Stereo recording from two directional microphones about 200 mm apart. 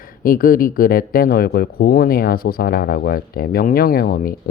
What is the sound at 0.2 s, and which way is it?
Speech, 45° left (ahead or behind).